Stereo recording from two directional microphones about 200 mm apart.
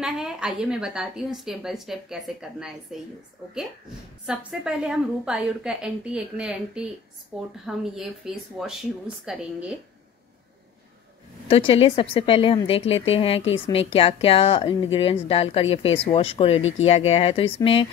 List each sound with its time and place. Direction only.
0.0 s a woman's voice: centre (ahead or behind)
4.3 s a woman's voice: 5° right (ahead or behind)
11.4 s a woman's voice: 30° left (ahead or behind)